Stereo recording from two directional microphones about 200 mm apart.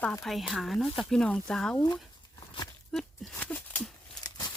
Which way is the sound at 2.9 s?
Centre (ahead or behind).